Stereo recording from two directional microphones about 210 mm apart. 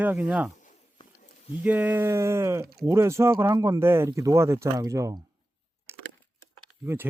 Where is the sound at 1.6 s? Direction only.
10° right (ahead or behind).